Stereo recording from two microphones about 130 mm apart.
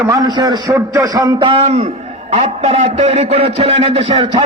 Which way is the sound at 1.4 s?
45° right (ahead or behind).